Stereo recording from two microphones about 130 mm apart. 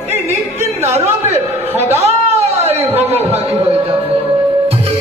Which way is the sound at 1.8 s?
55° right (ahead or behind).